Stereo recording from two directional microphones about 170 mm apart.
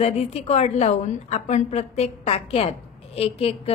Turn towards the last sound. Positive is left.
turn(degrees=35)  # may be behind; listen again after turning